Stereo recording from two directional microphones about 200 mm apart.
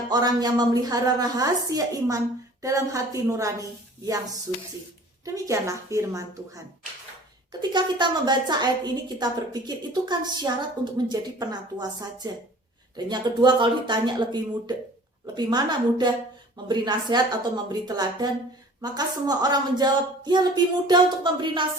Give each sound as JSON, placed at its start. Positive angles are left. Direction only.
{"t": 0.1, "sound": "a woman's voice", "side_deg": -20}
{"t": 5.2, "sound": "a woman's voice", "side_deg": -15}
{"t": 7.7, "sound": "speech", "side_deg": -25}